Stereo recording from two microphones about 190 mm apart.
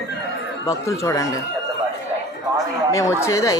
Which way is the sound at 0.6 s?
15° left (ahead or behind).